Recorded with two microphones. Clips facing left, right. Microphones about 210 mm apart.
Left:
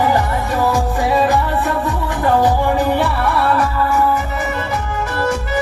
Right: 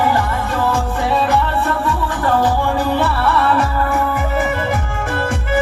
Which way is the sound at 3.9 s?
55° right (ahead or behind).